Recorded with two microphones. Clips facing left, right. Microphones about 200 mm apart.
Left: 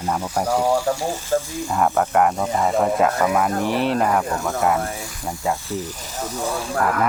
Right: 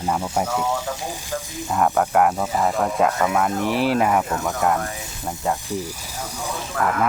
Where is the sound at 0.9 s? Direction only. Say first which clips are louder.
Left 7 dB; 50° left (ahead or behind).